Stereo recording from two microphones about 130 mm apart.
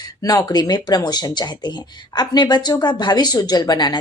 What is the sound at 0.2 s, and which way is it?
Speech, 30° left (ahead or behind).